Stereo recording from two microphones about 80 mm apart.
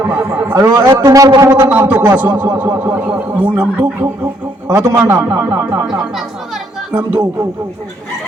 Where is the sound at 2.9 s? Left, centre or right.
Centre.